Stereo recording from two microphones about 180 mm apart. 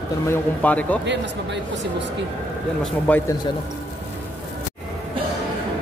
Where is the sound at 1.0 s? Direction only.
75° right (ahead or behind).